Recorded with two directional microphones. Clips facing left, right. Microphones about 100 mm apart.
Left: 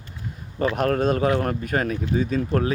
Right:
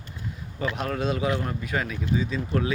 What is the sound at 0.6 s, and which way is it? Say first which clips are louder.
A man's voice: left 7 dB; 50° left (ahead or behind).